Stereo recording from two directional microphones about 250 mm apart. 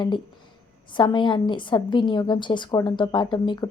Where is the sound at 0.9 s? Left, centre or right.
Centre.